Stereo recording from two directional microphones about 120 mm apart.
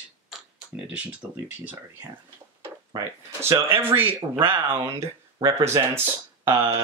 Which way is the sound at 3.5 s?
20° right (ahead or behind).